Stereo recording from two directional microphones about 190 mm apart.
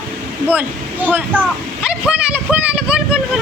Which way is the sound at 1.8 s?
5° right (ahead or behind).